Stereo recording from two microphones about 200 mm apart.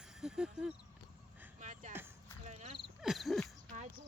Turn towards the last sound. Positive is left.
turn(degrees=0)  # may be behind; listen again after turning